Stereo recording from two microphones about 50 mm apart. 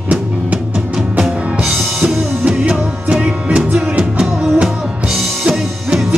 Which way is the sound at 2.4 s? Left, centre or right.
Right.